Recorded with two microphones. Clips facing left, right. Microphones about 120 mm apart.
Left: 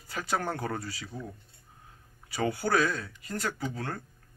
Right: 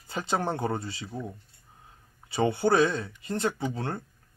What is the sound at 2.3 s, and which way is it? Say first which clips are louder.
Speech: right 4 dB; 25° right (ahead or behind).